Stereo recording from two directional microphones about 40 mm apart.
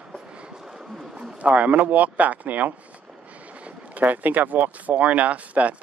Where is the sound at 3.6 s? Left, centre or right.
Right.